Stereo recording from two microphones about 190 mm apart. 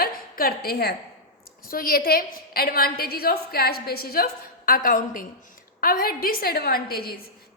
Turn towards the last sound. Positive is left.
turn(degrees=55)  # may be behind; listen again after turning